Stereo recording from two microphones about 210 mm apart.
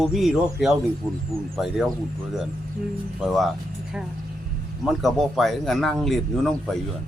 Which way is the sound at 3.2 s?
Centre (ahead or behind).